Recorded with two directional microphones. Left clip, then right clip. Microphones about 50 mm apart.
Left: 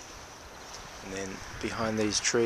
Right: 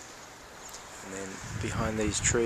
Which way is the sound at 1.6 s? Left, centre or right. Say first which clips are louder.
Left 1 dB; left.